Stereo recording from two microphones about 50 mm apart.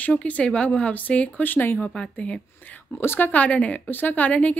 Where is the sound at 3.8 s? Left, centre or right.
Left.